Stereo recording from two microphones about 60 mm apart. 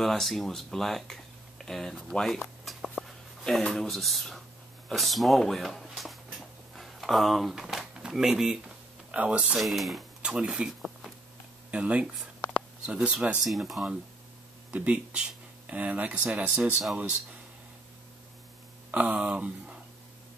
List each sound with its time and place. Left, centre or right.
0.0 s speech: centre
4.8 s a sound: centre
9.1 s speech: right
9.6 s speech: centre
10.2 s speech: centre
11.7 s speech: centre
13.4 s speech: centre
14.7 s speech: centre
19.0 s speech: centre